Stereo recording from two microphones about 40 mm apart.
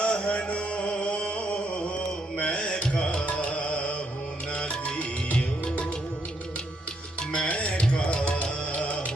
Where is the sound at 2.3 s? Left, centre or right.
Left.